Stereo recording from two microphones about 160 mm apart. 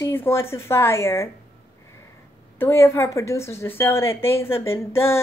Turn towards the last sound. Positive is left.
turn(degrees=15)  # may be behind; listen again after turning